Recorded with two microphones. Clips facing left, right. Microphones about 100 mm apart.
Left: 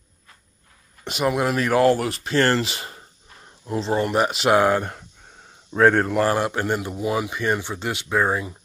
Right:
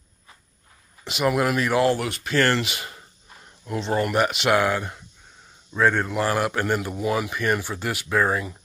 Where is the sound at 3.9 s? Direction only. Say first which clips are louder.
Even; 25° left (ahead or behind); by 6.3 s 45° left (ahead or behind).